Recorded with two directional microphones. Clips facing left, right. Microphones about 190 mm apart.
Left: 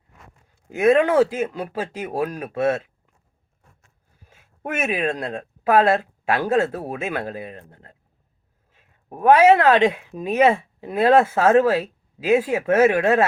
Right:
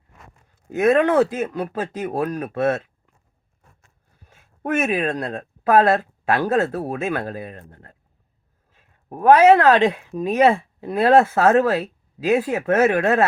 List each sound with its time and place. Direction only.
0.7 s speech: 10° left (ahead or behind)
4.2 s a sound: 10° left (ahead or behind)
5.2 s speech: 15° left (ahead or behind)
9.6 s speech: 15° left (ahead or behind)